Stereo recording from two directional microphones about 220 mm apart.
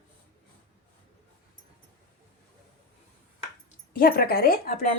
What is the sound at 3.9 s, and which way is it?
Speech, 40° left (ahead or behind).